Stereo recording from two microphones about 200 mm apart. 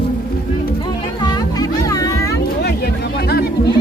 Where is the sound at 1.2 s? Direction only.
20° left (ahead or behind).